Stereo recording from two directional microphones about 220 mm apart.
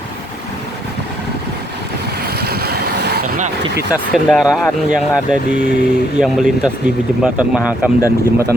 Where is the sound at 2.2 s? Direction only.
45° right (ahead or behind).